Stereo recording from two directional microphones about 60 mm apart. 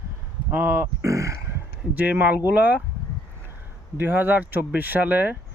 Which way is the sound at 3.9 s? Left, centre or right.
Right.